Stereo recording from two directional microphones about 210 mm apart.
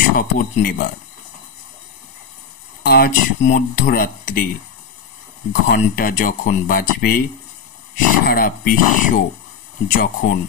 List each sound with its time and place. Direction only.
0.2 s speech: 45° left (ahead or behind)
2.8 s speech: 45° left (ahead or behind)
5.5 s speech: 45° left (ahead or behind)